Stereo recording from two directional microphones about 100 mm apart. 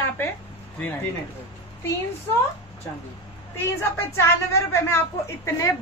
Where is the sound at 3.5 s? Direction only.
25° left (ahead or behind).